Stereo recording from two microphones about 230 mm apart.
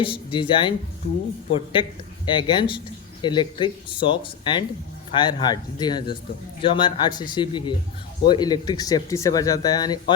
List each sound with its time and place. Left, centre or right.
0.0 s a man's voice: left